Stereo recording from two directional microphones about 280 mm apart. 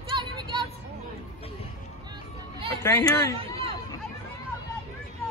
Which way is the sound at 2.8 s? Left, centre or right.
Centre.